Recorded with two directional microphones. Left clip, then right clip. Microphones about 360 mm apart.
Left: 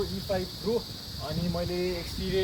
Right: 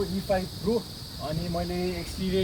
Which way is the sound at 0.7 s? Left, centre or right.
Centre.